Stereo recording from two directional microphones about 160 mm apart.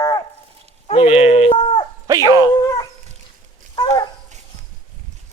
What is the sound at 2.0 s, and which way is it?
Dog, 20° right (ahead or behind).